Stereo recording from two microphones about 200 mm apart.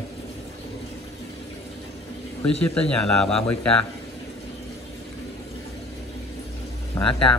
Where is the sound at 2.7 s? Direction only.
5° left (ahead or behind).